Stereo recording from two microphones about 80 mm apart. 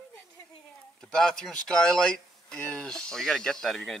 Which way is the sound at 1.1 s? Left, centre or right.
Centre.